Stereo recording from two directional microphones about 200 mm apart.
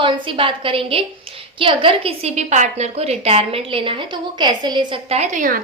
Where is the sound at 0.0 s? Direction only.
25° right (ahead or behind).